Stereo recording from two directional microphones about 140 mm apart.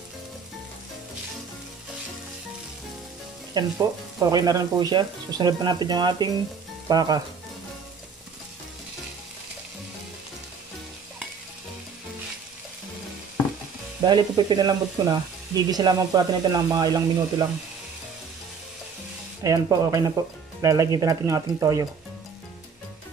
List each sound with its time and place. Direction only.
3.6 s speech: 30° right (ahead or behind)
14.0 s speech: 30° right (ahead or behind)
19.4 s speech: 25° right (ahead or behind)